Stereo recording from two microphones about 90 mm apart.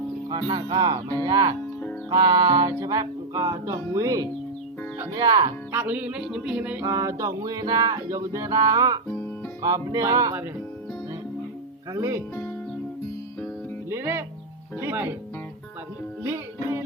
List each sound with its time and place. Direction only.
0.3 s speech: 55° right (ahead or behind)
2.7 s music: 40° right (ahead or behind)
5.1 s speech: 45° right (ahead or behind)
5.7 s music: 20° right (ahead or behind)
6.8 s music: 35° right (ahead or behind)
11.9 s music: 35° right (ahead or behind)
13.9 s music: 25° right (ahead or behind)
14.8 s speech: 25° right (ahead or behind)
16.2 s music: 30° right (ahead or behind)